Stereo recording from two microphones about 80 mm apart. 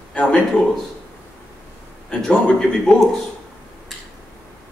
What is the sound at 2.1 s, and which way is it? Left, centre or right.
Speech, centre.